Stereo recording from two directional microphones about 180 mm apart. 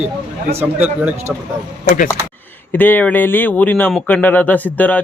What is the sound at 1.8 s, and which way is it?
Speech, 45° left (ahead or behind).